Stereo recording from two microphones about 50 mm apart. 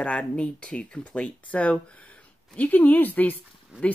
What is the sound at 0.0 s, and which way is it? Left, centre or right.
Speech, left.